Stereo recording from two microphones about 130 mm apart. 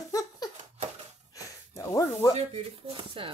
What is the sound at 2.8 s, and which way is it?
Speech, 45° right (ahead or behind).